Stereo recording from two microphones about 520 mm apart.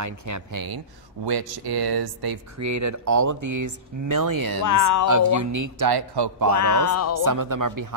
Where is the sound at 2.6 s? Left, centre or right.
Right.